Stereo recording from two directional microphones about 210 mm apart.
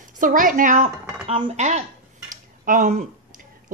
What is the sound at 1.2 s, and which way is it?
Speech, 25° right (ahead or behind).